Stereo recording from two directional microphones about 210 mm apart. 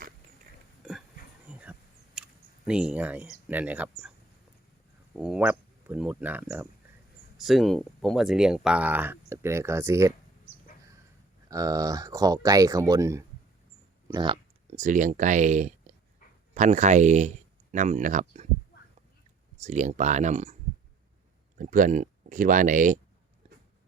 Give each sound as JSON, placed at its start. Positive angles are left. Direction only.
{"t": 1.5, "sound": "insect", "side_deg": -5}
{"t": 2.1, "sound": "speech", "side_deg": -5}
{"t": 5.1, "sound": "speech", "side_deg": -5}
{"t": 11.4, "sound": "speech", "side_deg": -15}
{"t": 14.1, "sound": "a sound", "side_deg": -20}
{"t": 14.8, "sound": "speech", "side_deg": -35}
{"t": 19.5, "sound": "speech", "side_deg": -35}
{"t": 21.6, "sound": "speech", "side_deg": -40}